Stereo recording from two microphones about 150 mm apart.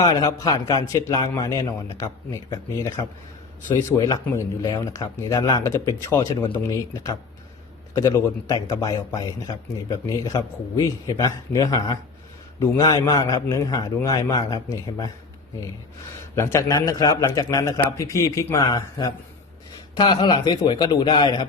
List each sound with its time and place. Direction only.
0.0 s a man's voice: 20° left (ahead or behind)
16.3 s a man's voice: 20° left (ahead or behind)